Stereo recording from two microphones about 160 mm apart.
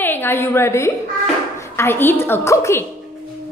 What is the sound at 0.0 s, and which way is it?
A woman's voice, 15° left (ahead or behind).